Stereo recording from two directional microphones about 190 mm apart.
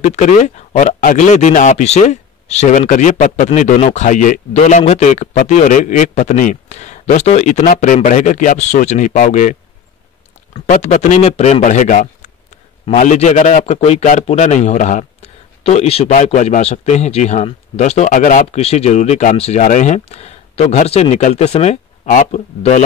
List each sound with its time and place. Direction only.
0.0 s speech: 40° left (ahead or behind)